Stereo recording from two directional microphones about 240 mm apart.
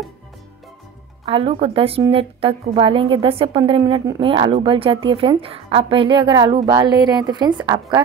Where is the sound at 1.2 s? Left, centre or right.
Right.